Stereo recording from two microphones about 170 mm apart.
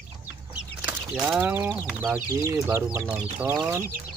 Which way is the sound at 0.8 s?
5° right (ahead or behind).